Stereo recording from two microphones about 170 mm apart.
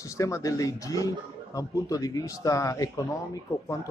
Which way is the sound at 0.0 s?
20° left (ahead or behind).